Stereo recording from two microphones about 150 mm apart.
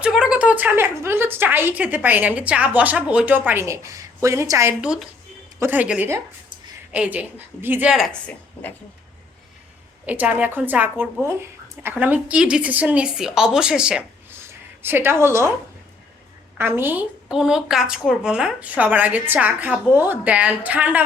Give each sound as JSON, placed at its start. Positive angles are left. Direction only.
{"t": 0.0, "sound": "speech", "side_deg": -5}
{"t": 4.8, "sound": "speech", "side_deg": -5}
{"t": 7.9, "sound": "speech", "side_deg": 0}
{"t": 10.1, "sound": "speech", "side_deg": -10}
{"t": 16.6, "sound": "speech", "side_deg": -15}